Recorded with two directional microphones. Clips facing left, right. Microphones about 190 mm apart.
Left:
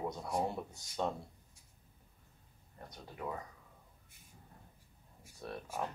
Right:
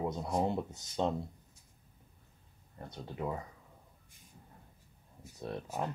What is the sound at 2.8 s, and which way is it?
Speech, 25° right (ahead or behind).